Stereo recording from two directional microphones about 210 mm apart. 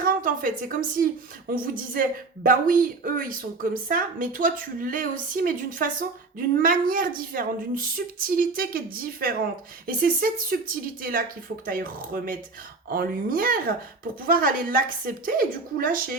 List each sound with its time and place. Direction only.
0.0 s a woman's voice: 40° right (ahead or behind)
11.6 s a woman's voice: 45° right (ahead or behind)